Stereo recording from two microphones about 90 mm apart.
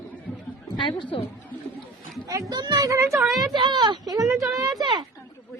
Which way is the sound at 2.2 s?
45° right (ahead or behind).